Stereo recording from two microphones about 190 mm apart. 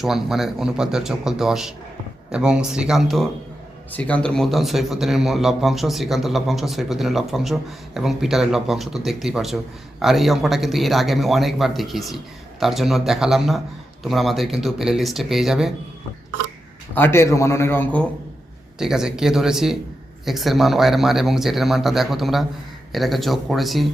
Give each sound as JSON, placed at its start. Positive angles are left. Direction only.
{"t": 0.0, "sound": "a man's voice", "side_deg": 0}
{"t": 16.9, "sound": "a man's voice", "side_deg": 10}
{"t": 18.8, "sound": "a man's voice", "side_deg": -5}